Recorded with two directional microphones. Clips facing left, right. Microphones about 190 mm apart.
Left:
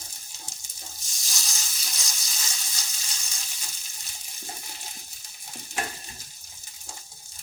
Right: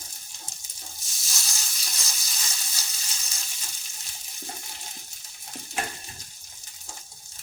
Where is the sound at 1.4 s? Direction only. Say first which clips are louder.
Even; centre (ahead or behind).